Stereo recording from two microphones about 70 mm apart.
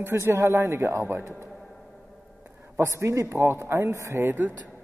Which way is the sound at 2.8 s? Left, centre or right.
Right.